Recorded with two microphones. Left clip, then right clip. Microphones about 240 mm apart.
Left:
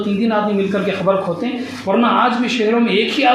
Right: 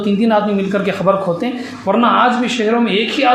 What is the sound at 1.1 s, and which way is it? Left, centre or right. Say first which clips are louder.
Speech: right 2 dB; right.